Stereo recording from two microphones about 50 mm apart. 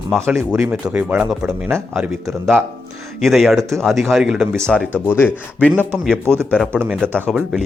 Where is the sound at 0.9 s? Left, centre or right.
Right.